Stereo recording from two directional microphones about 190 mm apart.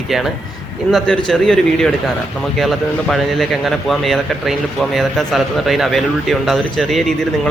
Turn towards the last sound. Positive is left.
turn(degrees=0)  # may be behind; listen again after turning